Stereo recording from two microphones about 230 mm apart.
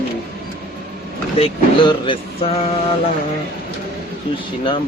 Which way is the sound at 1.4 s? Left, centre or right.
Left.